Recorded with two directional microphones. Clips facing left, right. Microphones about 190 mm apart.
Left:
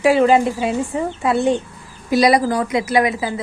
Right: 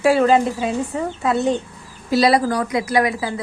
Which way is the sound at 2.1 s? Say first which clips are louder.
Left 1 dB; 15° left (ahead or behind).